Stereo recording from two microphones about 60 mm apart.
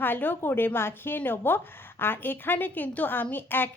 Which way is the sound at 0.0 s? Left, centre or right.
Left.